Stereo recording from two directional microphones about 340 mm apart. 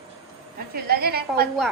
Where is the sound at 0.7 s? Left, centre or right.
Right.